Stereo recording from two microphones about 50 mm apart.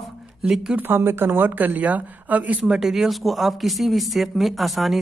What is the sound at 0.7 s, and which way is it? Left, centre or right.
A woman's voice, right.